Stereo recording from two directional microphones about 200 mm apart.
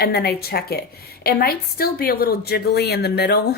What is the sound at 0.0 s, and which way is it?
A woman's voice, 50° left (ahead or behind).